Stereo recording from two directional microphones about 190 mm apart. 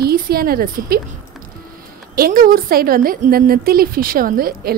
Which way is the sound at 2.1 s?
50° right (ahead or behind).